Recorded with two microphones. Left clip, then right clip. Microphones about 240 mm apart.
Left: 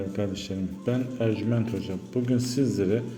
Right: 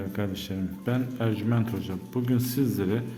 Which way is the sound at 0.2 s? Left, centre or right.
Centre.